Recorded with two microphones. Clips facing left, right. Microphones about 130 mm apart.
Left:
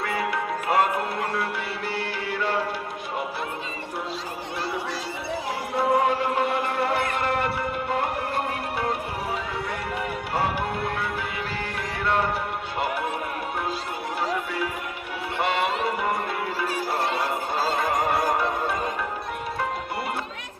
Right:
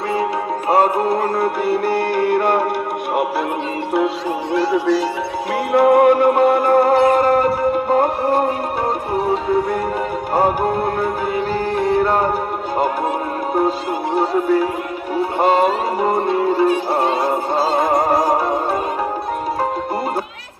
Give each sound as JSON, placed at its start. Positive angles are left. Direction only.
{"t": 0.7, "sound": "music", "side_deg": -35}
{"t": 5.7, "sound": "music", "side_deg": -65}
{"t": 14.2, "sound": "speech", "side_deg": -40}
{"t": 15.4, "sound": "music", "side_deg": -40}